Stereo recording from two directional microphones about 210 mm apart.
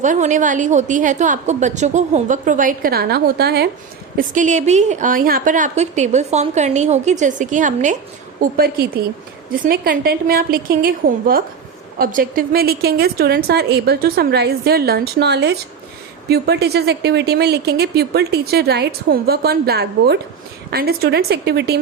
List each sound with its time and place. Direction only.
0.0 s a woman's voice: 35° right (ahead or behind)
4.2 s a woman's voice: 35° right (ahead or behind); by 21.8 s 55° right (ahead or behind)